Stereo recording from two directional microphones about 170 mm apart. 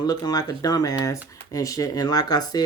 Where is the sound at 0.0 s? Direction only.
25° left (ahead or behind).